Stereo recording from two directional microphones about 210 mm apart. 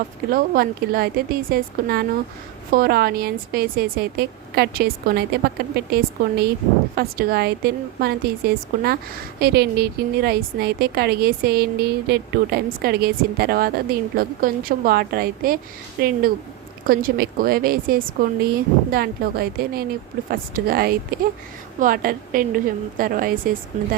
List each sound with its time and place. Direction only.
0.3 s a woman's voice: 45° right (ahead or behind)